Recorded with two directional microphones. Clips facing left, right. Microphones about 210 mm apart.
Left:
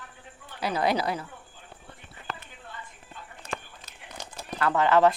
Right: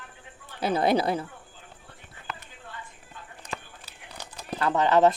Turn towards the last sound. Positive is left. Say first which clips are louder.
# right 1 dB
turn(degrees=-20)  # may be behind; listen again after turning